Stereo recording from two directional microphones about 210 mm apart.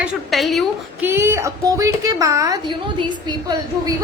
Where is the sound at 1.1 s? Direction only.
10° right (ahead or behind).